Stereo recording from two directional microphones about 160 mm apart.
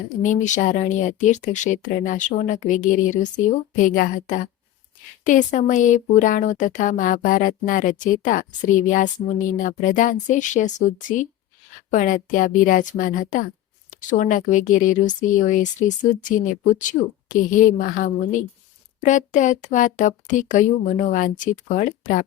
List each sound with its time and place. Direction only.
0.2 s speech: 50° left (ahead or behind)